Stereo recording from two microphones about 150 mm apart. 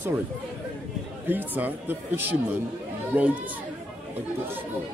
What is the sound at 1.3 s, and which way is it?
Speech, 10° right (ahead or behind).